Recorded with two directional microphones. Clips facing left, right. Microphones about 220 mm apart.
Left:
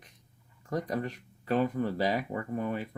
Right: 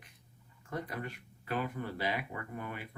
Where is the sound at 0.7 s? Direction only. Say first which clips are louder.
Left 7 dB; 40° left (ahead or behind).